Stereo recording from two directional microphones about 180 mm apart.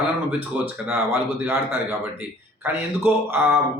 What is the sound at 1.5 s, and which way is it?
Speech, 15° right (ahead or behind).